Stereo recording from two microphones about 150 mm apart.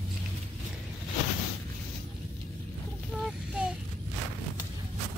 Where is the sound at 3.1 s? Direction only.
5° right (ahead or behind).